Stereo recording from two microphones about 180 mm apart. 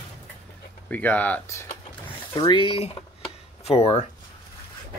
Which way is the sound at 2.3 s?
25° left (ahead or behind).